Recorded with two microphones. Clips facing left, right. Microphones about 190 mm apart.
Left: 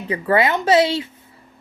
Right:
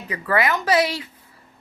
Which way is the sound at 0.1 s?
25° left (ahead or behind).